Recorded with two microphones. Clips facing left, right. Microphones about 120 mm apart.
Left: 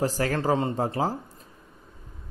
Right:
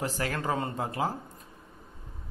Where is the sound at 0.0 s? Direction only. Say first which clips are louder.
Left 6 dB; 40° left (ahead or behind).